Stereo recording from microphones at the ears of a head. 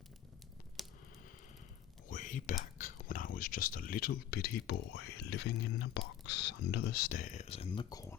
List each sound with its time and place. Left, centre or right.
2.0 s speech: left